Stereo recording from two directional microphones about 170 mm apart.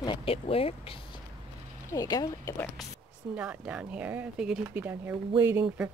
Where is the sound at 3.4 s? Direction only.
5° right (ahead or behind).